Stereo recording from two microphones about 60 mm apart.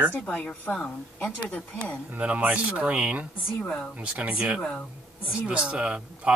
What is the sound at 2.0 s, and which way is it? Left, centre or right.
Speech, right.